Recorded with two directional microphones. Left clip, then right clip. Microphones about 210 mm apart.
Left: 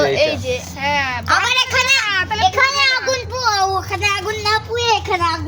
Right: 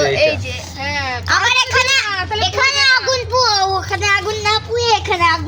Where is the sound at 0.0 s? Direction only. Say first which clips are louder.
Right 1 dB; 40° left (ahead or behind).